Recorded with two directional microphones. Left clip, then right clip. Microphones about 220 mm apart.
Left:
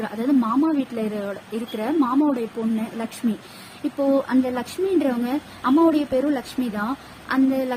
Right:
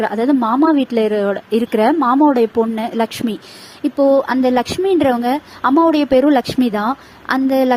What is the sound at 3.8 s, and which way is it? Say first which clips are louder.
Speech: right 8 dB; 35° right (ahead or behind).